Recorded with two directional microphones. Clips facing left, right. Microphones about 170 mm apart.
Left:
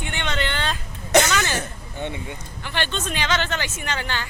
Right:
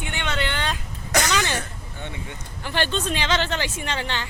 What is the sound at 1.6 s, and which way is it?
Speech, 20° left (ahead or behind).